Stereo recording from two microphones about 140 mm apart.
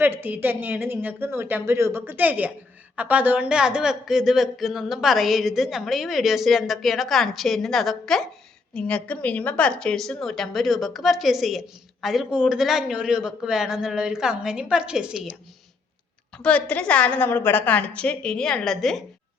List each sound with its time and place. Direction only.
0.0 s speech: 15° right (ahead or behind)
16.4 s a woman's voice: 10° left (ahead or behind)